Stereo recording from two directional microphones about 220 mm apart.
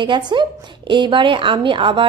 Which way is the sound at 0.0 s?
20° right (ahead or behind).